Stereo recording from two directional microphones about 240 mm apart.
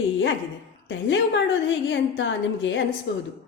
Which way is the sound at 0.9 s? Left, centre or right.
Left.